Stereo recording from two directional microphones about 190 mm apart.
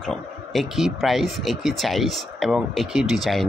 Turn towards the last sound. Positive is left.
turn(degrees=0)  # may be behind; listen again after turning